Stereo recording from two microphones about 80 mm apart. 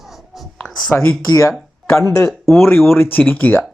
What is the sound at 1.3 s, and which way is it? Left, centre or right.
Speech, left.